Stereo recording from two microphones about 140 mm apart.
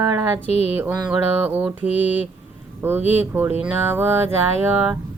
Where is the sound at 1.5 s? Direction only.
10° right (ahead or behind).